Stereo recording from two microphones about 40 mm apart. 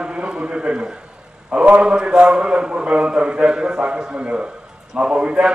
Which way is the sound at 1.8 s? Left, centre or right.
Right.